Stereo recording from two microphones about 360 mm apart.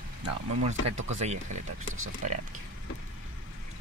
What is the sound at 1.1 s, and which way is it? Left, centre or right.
Speech, centre.